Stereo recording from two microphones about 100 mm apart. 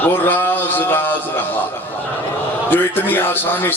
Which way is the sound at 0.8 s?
20° left (ahead or behind).